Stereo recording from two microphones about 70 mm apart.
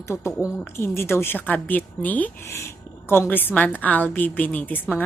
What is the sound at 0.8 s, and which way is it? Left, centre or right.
Speech, left.